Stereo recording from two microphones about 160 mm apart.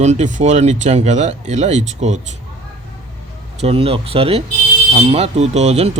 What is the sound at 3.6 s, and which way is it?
Speech, 40° right (ahead or behind).